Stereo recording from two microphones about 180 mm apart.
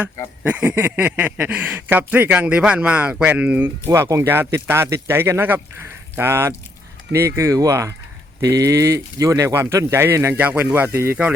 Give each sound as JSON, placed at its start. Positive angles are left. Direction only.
{"t": 0.4, "sound": "speech", "side_deg": -10}